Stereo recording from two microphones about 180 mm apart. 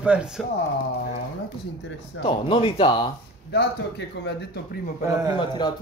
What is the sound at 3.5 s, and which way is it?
Speech, 70° left (ahead or behind).